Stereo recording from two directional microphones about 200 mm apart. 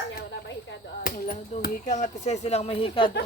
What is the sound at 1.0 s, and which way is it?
Speech, 45° left (ahead or behind).